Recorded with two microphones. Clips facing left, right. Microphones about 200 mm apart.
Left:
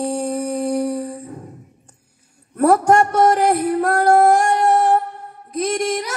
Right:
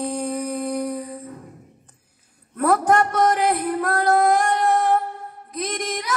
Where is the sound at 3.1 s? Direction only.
45° left (ahead or behind).